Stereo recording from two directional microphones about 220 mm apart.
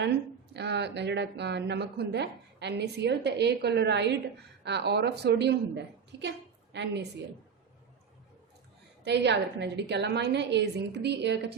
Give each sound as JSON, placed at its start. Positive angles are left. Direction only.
{"t": 0.5, "sound": "speech", "side_deg": -50}
{"t": 9.0, "sound": "speech", "side_deg": -50}